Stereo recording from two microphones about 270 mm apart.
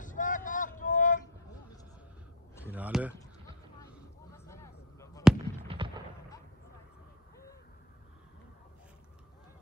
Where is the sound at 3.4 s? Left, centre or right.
Centre.